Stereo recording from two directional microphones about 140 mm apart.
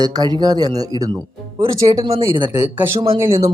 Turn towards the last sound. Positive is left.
turn(degrees=-20)  # may be behind; listen again after turning